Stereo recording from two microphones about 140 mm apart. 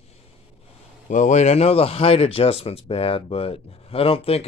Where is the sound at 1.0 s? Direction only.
60° left (ahead or behind).